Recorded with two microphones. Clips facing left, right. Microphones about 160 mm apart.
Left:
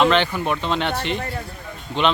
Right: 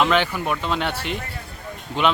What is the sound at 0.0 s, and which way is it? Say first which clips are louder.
A man's voice: left 2 dB; 5° right (ahead or behind).